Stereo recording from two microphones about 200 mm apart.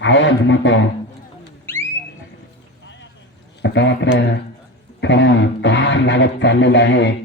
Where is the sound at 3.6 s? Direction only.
65° left (ahead or behind).